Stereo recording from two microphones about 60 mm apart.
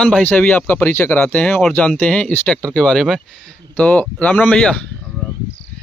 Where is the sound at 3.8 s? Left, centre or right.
Left.